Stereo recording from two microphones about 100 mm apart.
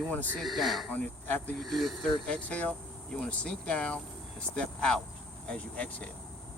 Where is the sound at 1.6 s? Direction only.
Centre (ahead or behind).